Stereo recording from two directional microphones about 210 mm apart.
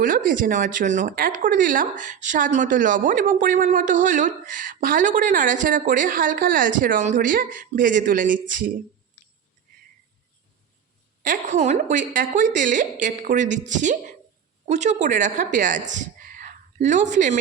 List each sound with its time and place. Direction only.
0.0 s speech: 40° right (ahead or behind)
11.2 s a woman's voice: 35° right (ahead or behind)